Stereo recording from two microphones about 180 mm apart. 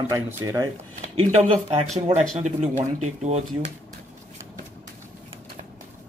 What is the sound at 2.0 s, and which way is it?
Speech, 35° right (ahead or behind).